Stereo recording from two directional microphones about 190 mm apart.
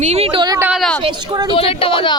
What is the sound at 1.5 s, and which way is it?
Speech, 30° left (ahead or behind).